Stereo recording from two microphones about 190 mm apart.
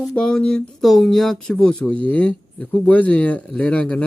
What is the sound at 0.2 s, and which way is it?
Speech, 5° left (ahead or behind).